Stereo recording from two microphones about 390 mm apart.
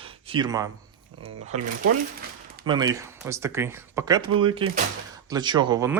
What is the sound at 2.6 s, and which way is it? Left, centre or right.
Speech, centre.